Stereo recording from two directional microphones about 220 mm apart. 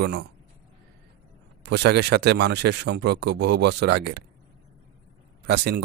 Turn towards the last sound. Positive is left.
turn(degrees=-50)  # may be behind; listen again after turning